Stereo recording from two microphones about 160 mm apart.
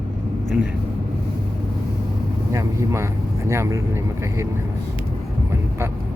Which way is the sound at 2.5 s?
20° right (ahead or behind).